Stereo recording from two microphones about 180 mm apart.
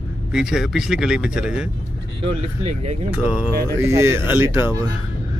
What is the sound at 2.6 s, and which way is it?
Speech, 35° right (ahead or behind).